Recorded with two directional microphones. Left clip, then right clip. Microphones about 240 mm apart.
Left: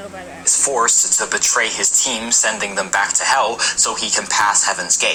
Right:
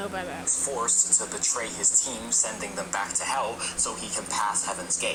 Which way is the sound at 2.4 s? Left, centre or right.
Left.